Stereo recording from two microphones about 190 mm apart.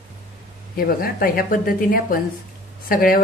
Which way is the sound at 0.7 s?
50° left (ahead or behind).